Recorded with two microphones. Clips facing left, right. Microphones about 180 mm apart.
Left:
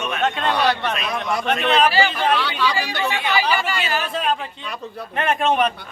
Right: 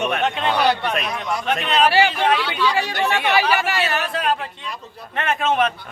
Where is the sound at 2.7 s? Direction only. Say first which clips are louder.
Right 3 dB; 65° right (ahead or behind).